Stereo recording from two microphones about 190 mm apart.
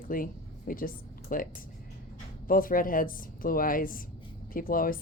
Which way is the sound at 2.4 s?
50° left (ahead or behind).